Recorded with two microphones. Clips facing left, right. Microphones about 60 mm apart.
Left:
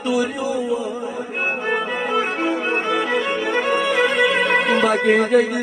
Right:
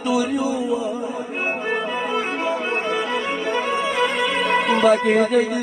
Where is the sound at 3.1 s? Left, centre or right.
Left.